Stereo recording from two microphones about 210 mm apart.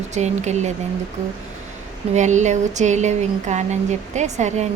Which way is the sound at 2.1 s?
35° right (ahead or behind).